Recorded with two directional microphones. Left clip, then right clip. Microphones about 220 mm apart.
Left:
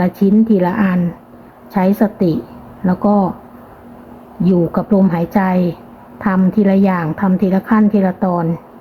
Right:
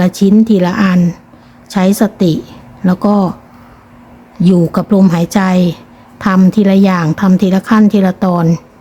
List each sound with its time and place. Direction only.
0.0 s a woman's voice: 25° right (ahead or behind)
0.3 s speech: centre (ahead or behind)
0.5 s a woman's voice: 25° right (ahead or behind)
4.5 s a woman's voice: 25° right (ahead or behind)